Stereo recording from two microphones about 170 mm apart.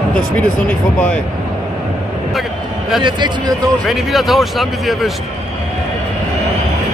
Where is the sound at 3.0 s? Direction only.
25° right (ahead or behind).